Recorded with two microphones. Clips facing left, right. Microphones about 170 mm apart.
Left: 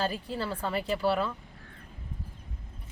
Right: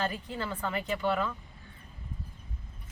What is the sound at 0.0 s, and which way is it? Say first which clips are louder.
Speech: left 2 dB; 35° left (ahead or behind).